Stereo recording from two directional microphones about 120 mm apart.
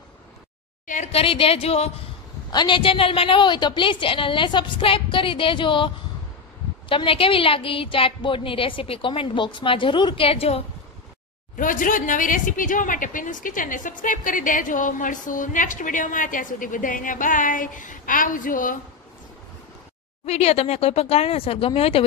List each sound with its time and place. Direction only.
0.8 s a sound: 90° left
1.1 s speech: 50° left (ahead or behind)
2.5 s a woman's voice: 40° left (ahead or behind)
6.9 s a woman's voice: 45° left (ahead or behind)
11.5 s a woman's voice: 90° left
20.2 s speech: 60° left (ahead or behind)